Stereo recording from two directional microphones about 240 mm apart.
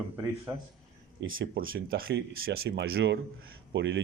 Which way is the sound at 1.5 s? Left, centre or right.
Right.